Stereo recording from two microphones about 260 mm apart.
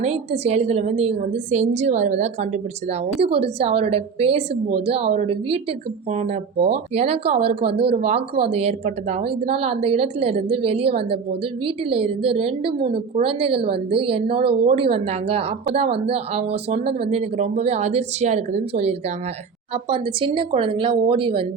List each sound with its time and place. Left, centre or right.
0.0 s speech: right